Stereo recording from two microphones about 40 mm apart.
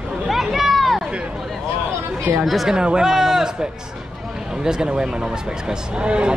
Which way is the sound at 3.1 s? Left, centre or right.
Centre.